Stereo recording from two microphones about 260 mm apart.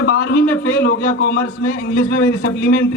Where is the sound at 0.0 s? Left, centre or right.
Left.